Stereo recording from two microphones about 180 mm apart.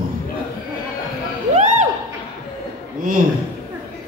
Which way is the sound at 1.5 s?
40° right (ahead or behind).